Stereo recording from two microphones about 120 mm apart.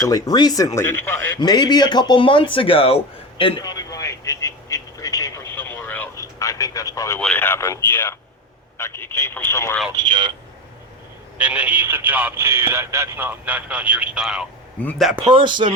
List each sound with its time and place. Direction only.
0.0 s speech: 30° left (ahead or behind)
1.4 s speech: 35° left (ahead or behind)
3.6 s radio: 30° left (ahead or behind)
5.5 s vehicle: 15° left (ahead or behind)
6.4 s radio: 30° left (ahead or behind)
7.2 s speech: 15° left (ahead or behind)
9.9 s speech: 35° right (ahead or behind)
11.3 s speech: 10° right (ahead or behind)
14.8 s a man's voice: 10° left (ahead or behind)
15.3 s speech: 40° right (ahead or behind)